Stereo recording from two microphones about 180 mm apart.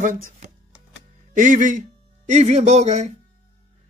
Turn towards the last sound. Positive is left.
turn(degrees=-40)  # may be behind; listen again after turning